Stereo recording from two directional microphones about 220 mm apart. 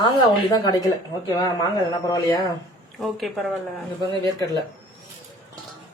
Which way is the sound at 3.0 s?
Centre (ahead or behind).